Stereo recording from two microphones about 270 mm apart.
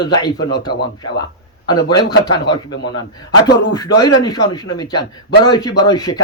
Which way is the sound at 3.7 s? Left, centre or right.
Centre.